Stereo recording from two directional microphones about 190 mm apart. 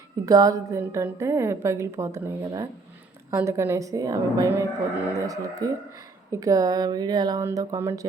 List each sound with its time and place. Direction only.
0.3 s a woman's voice: 20° right (ahead or behind)